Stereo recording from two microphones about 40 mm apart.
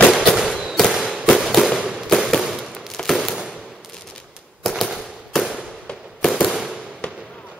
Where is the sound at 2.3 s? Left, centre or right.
Centre.